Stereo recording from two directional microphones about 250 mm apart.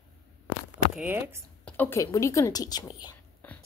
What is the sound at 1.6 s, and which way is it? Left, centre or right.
Speech, centre.